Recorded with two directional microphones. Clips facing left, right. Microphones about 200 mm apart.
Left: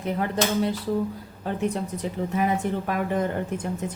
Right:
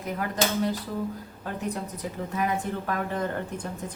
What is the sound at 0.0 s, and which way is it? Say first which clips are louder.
Speech: left 3 dB; 25° left (ahead or behind).